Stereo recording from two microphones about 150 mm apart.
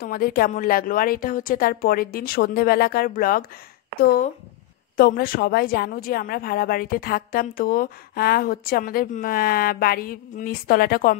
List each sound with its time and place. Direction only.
0.0 s a woman's voice: 90° left; by 3.4 s 70° left (ahead or behind)
4.9 s a woman's voice: 80° left